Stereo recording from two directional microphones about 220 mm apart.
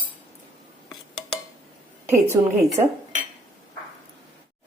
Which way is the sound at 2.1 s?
10° right (ahead or behind).